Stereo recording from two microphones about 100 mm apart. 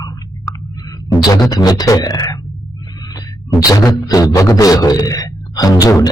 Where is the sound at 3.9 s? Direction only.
40° left (ahead or behind).